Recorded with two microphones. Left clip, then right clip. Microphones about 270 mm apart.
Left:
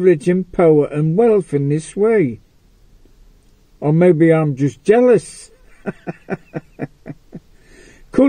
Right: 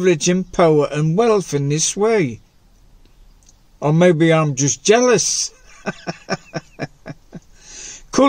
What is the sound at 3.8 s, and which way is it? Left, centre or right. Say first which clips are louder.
Speech: left 1 dB; right.